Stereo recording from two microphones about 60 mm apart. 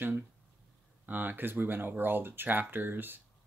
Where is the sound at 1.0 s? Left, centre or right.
Right.